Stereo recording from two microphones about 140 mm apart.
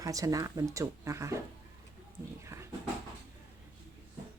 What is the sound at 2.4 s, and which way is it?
Speech, 20° right (ahead or behind).